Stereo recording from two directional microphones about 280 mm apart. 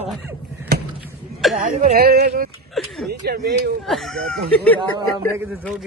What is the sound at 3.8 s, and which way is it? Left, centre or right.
Speech, centre.